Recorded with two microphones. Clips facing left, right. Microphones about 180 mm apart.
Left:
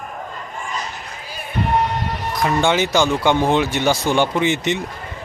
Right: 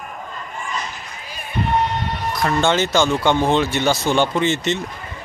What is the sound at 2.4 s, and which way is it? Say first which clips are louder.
A man's voice: left 1 dB; 15° left (ahead or behind).